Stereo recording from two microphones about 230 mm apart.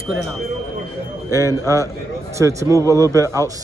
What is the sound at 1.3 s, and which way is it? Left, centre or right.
A man's voice, centre.